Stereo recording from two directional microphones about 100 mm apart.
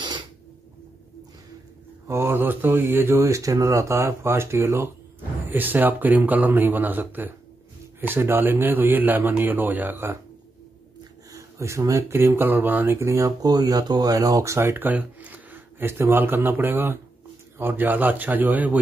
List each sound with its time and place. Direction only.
2.0 s speech: 25° right (ahead or behind)
11.3 s a man's voice: 30° right (ahead or behind)